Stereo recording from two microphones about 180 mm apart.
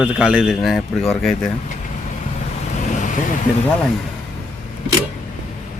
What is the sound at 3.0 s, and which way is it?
Vehicle, 45° left (ahead or behind).